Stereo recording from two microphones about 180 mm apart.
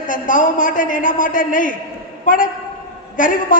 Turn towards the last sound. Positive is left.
turn(degrees=45)  # may be behind; listen again after turning